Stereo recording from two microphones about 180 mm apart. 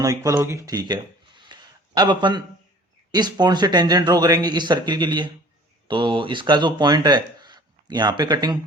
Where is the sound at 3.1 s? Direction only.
25° right (ahead or behind).